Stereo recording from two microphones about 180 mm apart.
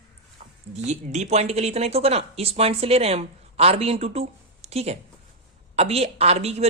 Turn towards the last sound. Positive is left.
turn(degrees=-35)  # may be behind; listen again after turning